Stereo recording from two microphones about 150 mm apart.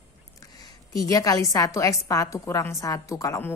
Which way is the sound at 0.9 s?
20° left (ahead or behind).